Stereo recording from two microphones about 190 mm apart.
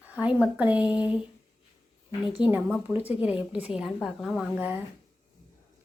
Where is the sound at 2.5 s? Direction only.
10° right (ahead or behind).